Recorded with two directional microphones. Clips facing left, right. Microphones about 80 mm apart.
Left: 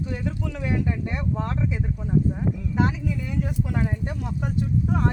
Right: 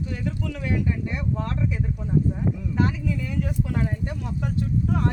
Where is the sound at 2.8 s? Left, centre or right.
Centre.